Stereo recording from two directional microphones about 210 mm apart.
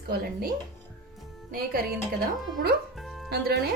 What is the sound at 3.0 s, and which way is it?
Music, centre (ahead or behind).